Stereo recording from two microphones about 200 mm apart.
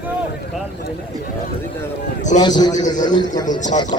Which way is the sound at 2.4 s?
20° left (ahead or behind).